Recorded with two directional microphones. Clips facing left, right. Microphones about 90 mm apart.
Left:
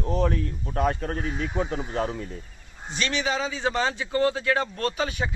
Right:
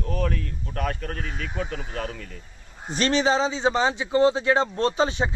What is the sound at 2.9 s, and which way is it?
Speech, 40° right (ahead or behind).